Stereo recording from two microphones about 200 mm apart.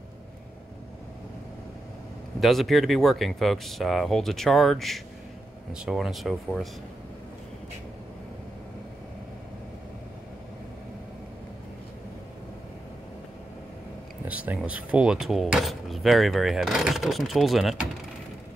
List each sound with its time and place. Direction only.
2.4 s speech: centre (ahead or behind)
14.2 s speech: 10° right (ahead or behind)